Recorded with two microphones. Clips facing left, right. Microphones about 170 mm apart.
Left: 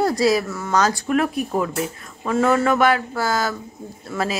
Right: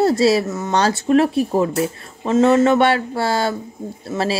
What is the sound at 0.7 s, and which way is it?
Speech, 30° right (ahead or behind).